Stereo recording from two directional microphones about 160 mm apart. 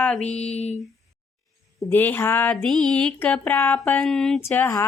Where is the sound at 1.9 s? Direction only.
10° left (ahead or behind).